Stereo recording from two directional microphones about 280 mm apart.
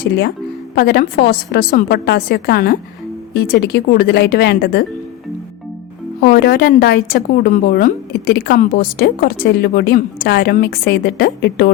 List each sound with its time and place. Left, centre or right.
0.8 s a woman's voice: left
6.1 s a woman's voice: left